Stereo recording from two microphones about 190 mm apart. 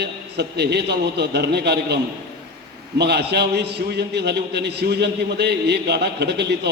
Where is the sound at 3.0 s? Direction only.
60° right (ahead or behind).